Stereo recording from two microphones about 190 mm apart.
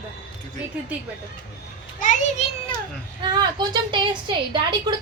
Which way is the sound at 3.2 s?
25° right (ahead or behind).